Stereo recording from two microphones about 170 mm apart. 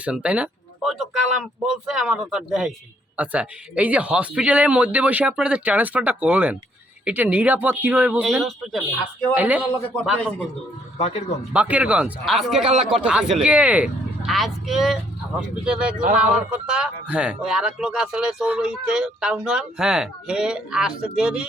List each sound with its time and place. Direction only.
0.0 s speech: 5° right (ahead or behind)
9.9 s a man's voice: 5° left (ahead or behind)
11.5 s speech: 5° right (ahead or behind)